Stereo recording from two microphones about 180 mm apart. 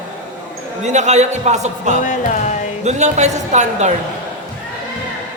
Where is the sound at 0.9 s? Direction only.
40° right (ahead or behind).